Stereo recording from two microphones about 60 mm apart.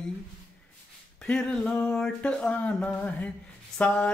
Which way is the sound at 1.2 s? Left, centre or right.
Centre.